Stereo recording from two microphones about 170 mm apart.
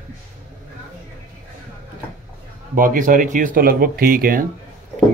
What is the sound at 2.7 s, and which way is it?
Speech, 55° right (ahead or behind).